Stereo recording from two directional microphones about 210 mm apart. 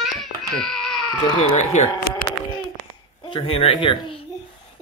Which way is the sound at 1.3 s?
35° left (ahead or behind).